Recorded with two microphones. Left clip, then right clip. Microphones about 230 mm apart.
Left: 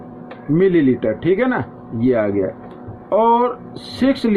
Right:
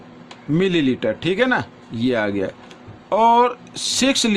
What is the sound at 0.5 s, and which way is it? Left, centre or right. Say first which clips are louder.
Speech: left 4 dB; right.